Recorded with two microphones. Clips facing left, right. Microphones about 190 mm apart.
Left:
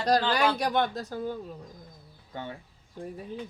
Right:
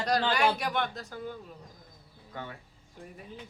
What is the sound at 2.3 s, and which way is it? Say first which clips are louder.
Speech: left 3 dB; 25° left (ahead or behind).